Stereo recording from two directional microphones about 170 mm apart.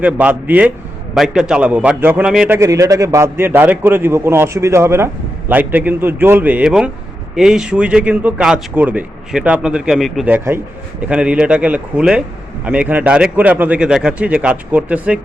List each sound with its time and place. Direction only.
0.0 s a man's voice: 10° right (ahead or behind)
2.6 s a man's voice: 20° right (ahead or behind)